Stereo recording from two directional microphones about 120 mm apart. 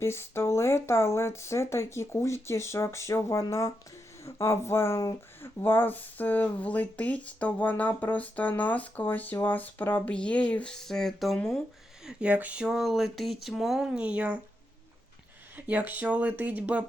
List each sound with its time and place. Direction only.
0.0 s speech: 20° left (ahead or behind)
12.0 s a sound: 10° right (ahead or behind)
15.5 s speech: 15° right (ahead or behind)